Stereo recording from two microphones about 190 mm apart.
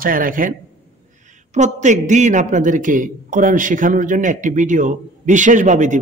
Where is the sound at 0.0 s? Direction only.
45° right (ahead or behind).